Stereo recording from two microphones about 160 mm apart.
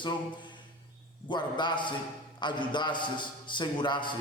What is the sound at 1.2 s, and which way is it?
A man's voice, 30° left (ahead or behind).